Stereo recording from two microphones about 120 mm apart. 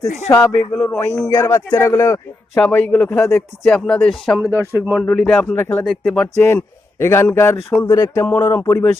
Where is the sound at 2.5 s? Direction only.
5° left (ahead or behind).